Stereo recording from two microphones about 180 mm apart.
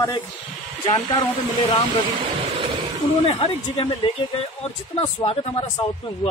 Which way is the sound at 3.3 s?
30° left (ahead or behind).